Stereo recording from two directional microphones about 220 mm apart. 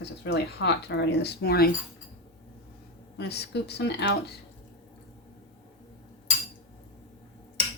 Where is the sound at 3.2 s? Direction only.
50° left (ahead or behind).